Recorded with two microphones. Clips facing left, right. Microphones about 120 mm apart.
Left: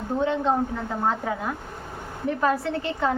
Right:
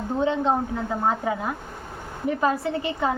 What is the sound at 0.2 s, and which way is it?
Speech, 20° right (ahead or behind).